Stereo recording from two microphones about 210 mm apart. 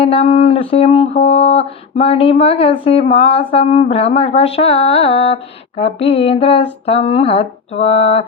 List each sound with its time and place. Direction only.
0.0 s mantra: 30° left (ahead or behind)